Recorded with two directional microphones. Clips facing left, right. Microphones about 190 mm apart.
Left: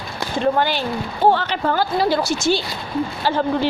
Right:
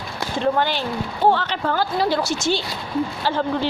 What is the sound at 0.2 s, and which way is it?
A woman's voice, 5° left (ahead or behind).